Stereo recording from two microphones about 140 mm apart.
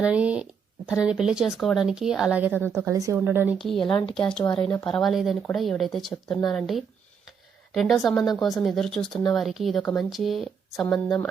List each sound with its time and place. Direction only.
0.0 s a woman's voice: 10° right (ahead or behind)
2.6 s speech: 10° left (ahead or behind)
2.8 s a woman's voice: 20° right (ahead or behind)
3.6 s speech: 5° left (ahead or behind)